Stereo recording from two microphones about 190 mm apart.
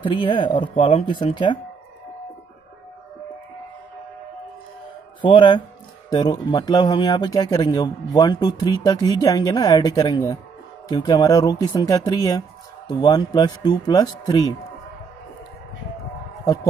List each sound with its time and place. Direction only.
0.0 s speech: 30° left (ahead or behind)
5.2 s speech: 25° left (ahead or behind)